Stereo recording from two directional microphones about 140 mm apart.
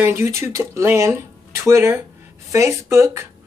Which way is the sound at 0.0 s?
20° right (ahead or behind).